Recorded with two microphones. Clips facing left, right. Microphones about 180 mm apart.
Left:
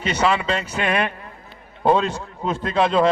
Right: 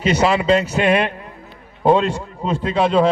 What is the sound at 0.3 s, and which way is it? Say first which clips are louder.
Speech: right 6 dB; 30° right (ahead or behind).